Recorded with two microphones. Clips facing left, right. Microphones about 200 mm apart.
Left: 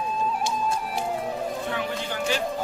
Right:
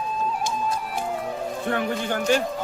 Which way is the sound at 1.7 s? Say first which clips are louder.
Right 4 dB; 55° right (ahead or behind).